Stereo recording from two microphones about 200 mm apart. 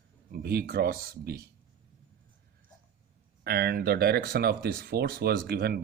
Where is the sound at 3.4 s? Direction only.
55° right (ahead or behind).